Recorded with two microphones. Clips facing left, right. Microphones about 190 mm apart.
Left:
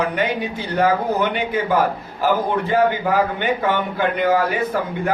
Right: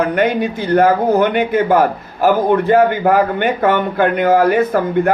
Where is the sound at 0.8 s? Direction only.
55° right (ahead or behind).